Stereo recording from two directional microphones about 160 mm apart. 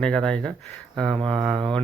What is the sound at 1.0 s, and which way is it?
Mantra, 30° right (ahead or behind).